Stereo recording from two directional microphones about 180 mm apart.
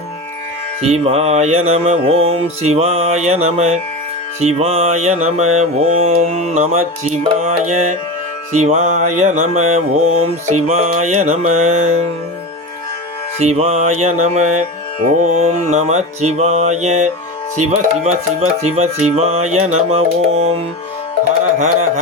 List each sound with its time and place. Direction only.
0.8 s mantra: 35° right (ahead or behind)
13.4 s mantra: 35° right (ahead or behind)
21.6 s mantra: 35° right (ahead or behind)